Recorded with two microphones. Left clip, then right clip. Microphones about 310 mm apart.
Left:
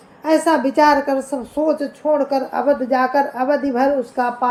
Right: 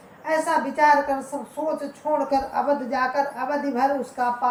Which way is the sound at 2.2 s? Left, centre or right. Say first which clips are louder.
Left 4 dB; centre.